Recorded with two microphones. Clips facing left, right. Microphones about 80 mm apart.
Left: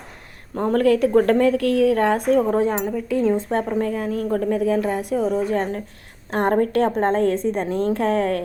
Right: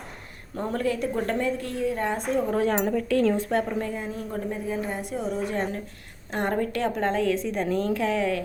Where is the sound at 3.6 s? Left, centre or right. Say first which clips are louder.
Left 6 dB; left.